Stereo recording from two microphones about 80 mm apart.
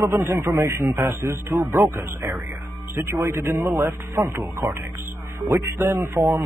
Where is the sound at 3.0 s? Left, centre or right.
Right.